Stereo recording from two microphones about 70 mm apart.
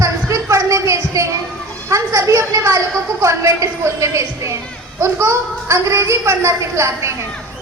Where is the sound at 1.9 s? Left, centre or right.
Right.